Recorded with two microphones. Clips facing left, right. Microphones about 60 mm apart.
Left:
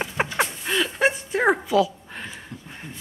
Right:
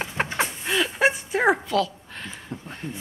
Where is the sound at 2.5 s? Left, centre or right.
Right.